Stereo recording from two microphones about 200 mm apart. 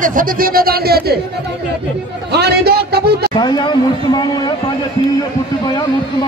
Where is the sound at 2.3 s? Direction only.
55° right (ahead or behind).